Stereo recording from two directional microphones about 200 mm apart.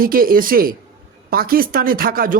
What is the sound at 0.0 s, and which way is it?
A man's voice, 45° right (ahead or behind).